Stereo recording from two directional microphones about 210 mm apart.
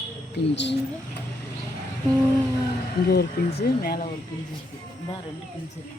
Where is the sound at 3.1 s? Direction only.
50° left (ahead or behind).